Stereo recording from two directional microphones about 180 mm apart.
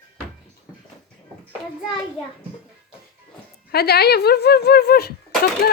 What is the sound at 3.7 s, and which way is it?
Speech, 60° left (ahead or behind).